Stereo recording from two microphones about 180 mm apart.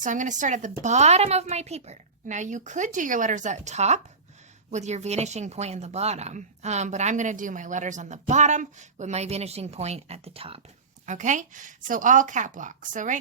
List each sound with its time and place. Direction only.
0.0 s speech: 45° right (ahead or behind)
11.0 s speech: 45° right (ahead or behind)